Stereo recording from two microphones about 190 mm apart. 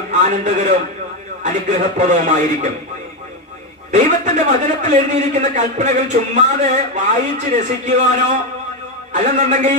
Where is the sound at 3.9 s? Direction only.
40° right (ahead or behind).